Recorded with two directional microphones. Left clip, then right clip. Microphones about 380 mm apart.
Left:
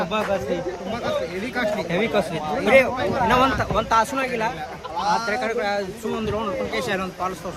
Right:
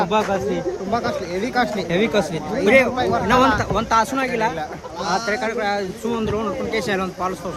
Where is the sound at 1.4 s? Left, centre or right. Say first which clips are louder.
Right 3 dB; centre.